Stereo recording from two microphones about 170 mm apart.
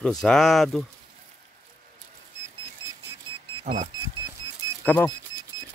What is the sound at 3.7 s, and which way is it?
Speech, 40° right (ahead or behind).